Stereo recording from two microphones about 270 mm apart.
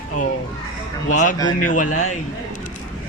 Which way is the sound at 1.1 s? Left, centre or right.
Left.